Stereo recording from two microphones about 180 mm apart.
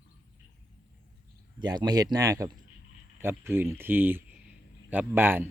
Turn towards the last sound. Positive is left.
turn(degrees=-10)  # may be behind; listen again after turning